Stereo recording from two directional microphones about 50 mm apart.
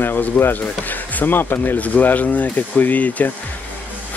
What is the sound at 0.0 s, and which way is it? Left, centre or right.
Speech, left.